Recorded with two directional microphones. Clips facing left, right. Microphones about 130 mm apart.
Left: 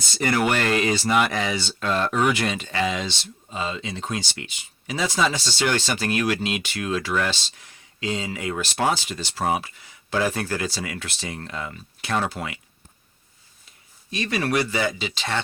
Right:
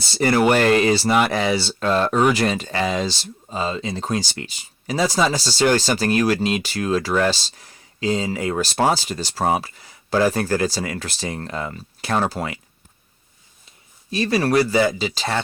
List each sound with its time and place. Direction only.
0.0 s speech: 30° right (ahead or behind)
14.1 s speech: 35° right (ahead or behind)